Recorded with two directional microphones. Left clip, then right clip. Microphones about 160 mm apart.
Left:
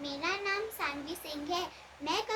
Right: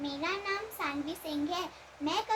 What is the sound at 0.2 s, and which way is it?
Child singing, 25° left (ahead or behind).